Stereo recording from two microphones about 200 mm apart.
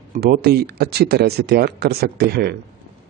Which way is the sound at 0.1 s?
50° right (ahead or behind).